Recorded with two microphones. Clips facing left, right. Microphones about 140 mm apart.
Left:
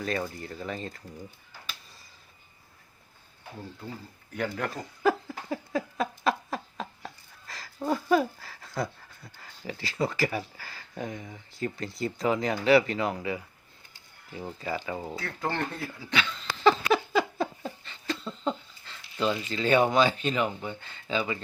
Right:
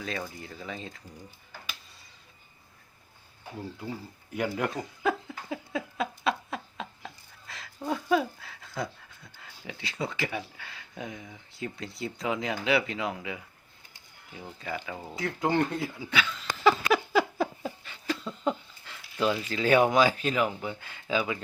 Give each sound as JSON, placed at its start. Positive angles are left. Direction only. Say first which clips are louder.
{"t": 0.0, "sound": "speech", "louder": "left 4 dB", "side_deg": 0}
{"t": 3.8, "sound": "speech", "louder": "right 3 dB", "side_deg": -10}
{"t": 5.5, "sound": "a sound", "louder": "left 3 dB", "side_deg": 0}
{"t": 14.6, "sound": "speech", "louder": "left 3 dB", "side_deg": 0}
{"t": 15.1, "sound": "speech", "louder": "right 9 dB", "side_deg": -15}
{"t": 16.6, "sound": "a sound", "louder": "left 1 dB", "side_deg": -5}